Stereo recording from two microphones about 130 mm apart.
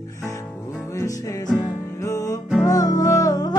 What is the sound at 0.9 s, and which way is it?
Music, 25° left (ahead or behind).